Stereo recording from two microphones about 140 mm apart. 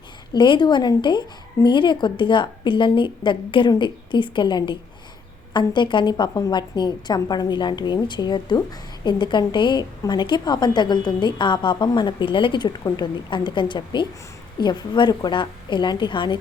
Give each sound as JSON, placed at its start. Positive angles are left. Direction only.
{"t": 0.3, "sound": "a woman's voice", "side_deg": 35}